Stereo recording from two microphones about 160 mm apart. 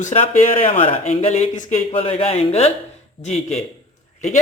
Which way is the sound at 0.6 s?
35° left (ahead or behind).